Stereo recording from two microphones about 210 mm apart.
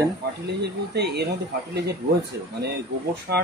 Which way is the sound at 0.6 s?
50° right (ahead or behind).